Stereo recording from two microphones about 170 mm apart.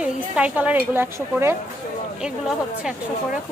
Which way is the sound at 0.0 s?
5° right (ahead or behind).